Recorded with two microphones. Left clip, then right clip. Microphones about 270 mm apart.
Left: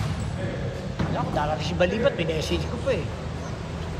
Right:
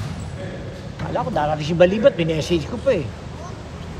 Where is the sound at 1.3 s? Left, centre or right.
Right.